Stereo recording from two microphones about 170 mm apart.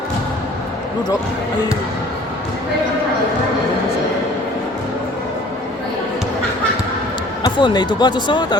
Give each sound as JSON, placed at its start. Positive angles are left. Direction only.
{"t": 7.4, "sound": "speech", "side_deg": 25}